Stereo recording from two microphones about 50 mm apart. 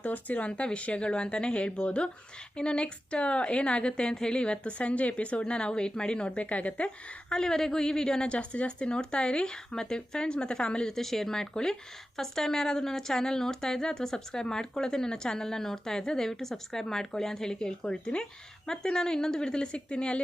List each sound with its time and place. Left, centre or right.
0.0 s a woman's voice: left